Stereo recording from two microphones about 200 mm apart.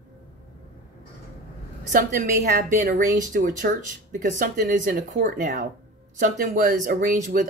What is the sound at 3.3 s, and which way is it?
Speech, 50° right (ahead or behind).